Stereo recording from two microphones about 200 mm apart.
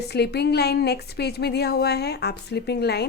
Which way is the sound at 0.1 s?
55° left (ahead or behind).